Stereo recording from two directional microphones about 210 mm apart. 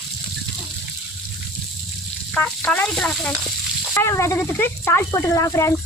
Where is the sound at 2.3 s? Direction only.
5° left (ahead or behind).